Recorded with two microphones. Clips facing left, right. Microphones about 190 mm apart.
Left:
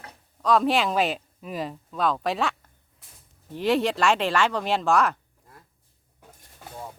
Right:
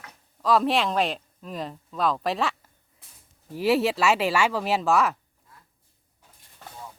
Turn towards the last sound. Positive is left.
turn(degrees=-5)  # may be behind; listen again after turning